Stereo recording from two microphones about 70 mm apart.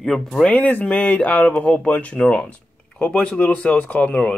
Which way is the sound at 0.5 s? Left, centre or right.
Left.